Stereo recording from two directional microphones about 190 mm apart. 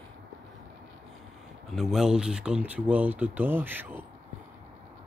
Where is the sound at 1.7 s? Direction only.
Centre (ahead or behind).